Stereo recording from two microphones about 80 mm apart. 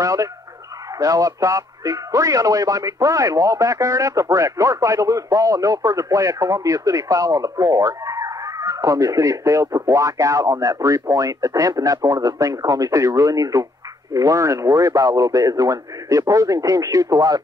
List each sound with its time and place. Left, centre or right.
0.0 s a man's voice: right